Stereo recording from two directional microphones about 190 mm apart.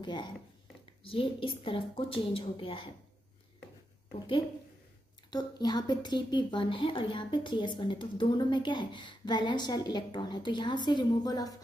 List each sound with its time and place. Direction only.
0.0 s a woman's voice: 25° left (ahead or behind)
5.3 s a woman's voice: 20° left (ahead or behind)